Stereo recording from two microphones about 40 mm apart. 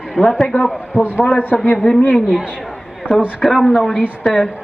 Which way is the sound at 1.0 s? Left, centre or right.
Left.